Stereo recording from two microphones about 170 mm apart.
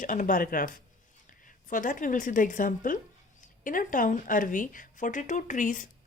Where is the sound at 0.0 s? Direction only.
50° left (ahead or behind).